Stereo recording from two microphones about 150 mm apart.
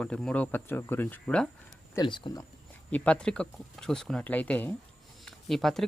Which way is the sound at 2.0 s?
30° left (ahead or behind).